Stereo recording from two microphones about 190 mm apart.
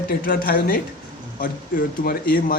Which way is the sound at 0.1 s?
50° left (ahead or behind).